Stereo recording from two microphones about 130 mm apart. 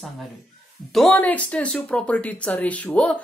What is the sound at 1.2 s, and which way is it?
Speech, 10° left (ahead or behind).